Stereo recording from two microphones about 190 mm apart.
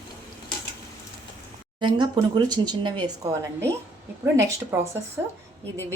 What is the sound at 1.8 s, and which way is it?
A woman's voice, 25° right (ahead or behind).